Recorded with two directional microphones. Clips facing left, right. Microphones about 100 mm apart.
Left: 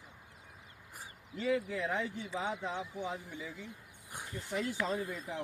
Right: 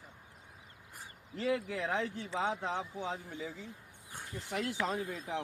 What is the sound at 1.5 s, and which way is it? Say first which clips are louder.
Speech: even; 70° right (ahead or behind).